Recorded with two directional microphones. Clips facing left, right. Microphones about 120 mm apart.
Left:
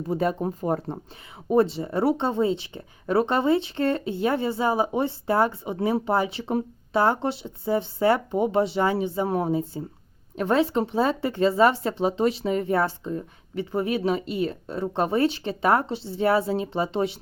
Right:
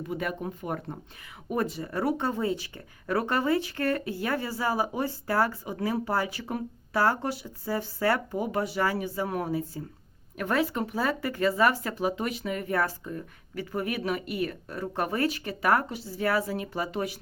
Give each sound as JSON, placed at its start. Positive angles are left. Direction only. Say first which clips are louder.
{"t": 0.1, "sound": "speech", "louder": "left 9 dB", "side_deg": 30}